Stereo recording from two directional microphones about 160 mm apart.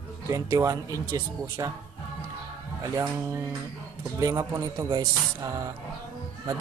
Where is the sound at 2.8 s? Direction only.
15° right (ahead or behind).